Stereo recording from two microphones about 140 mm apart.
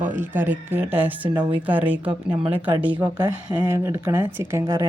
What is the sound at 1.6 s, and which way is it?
Speech, 10° right (ahead or behind).